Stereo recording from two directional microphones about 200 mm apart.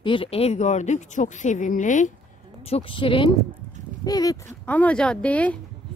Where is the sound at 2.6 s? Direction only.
30° left (ahead or behind); by 5.6 s 5° left (ahead or behind).